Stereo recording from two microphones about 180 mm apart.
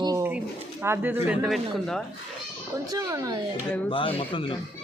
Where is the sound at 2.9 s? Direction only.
20° right (ahead or behind).